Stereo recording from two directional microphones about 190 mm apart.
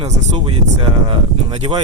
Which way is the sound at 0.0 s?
30° right (ahead or behind).